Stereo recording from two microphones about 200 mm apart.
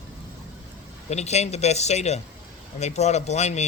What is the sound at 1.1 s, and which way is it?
A man's voice, 35° left (ahead or behind).